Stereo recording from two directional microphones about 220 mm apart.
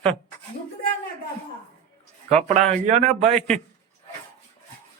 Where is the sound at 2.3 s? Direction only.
35° right (ahead or behind).